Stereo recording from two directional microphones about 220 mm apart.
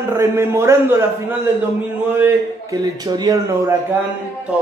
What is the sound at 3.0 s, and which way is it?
Speech, 15° right (ahead or behind).